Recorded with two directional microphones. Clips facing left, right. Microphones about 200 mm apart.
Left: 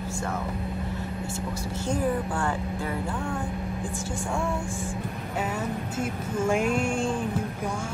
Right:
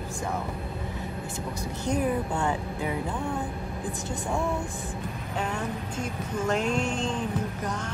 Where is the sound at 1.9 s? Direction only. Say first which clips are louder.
Even; 20° right (ahead or behind).